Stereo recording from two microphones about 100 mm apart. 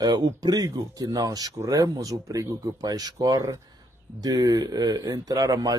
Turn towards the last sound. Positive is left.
turn(degrees=-40)  # may be behind; listen again after turning